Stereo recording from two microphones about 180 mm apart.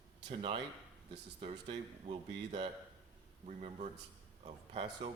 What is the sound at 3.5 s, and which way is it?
Speech, 40° right (ahead or behind).